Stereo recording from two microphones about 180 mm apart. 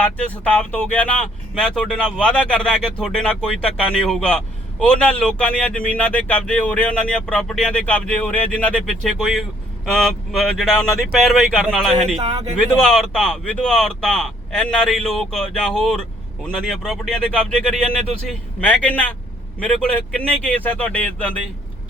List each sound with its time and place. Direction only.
0.0 s a man's voice: 5° left (ahead or behind)
12.0 s speech: 35° right (ahead or behind)
12.8 s a man's voice: centre (ahead or behind)
18.3 s speech: 10° left (ahead or behind)